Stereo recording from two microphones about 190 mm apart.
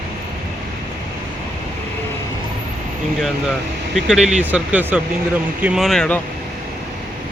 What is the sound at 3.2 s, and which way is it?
Speech, centre (ahead or behind).